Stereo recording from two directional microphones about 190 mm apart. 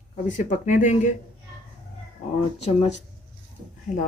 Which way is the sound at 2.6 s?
35° left (ahead or behind).